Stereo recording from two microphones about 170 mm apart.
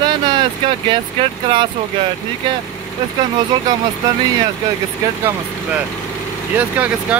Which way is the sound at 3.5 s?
25° right (ahead or behind).